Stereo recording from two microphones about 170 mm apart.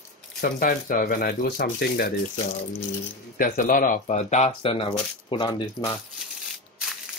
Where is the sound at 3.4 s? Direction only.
55° left (ahead or behind); by 6.0 s 25° left (ahead or behind).